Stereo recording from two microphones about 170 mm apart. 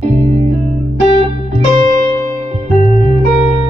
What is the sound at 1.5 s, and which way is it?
Music, 50° right (ahead or behind).